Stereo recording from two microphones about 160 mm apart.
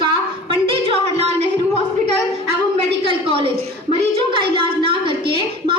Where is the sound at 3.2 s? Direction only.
35° right (ahead or behind).